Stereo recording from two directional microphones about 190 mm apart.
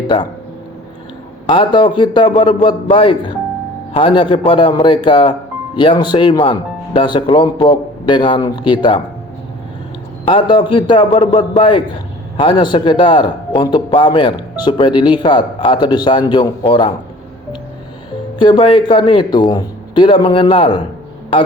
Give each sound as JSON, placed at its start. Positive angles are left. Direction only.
{"t": 1.5, "sound": "speech", "side_deg": 25}
{"t": 10.2, "sound": "speech", "side_deg": 25}
{"t": 18.3, "sound": "speech", "side_deg": 25}